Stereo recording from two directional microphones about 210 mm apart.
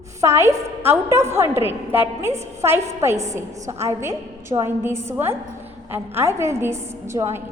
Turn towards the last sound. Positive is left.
turn(degrees=-15)  # may be behind; listen again after turning